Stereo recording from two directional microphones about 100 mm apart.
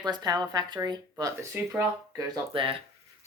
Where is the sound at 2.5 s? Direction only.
60° right (ahead or behind).